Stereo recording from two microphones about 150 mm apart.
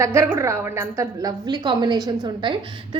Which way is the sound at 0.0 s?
20° right (ahead or behind).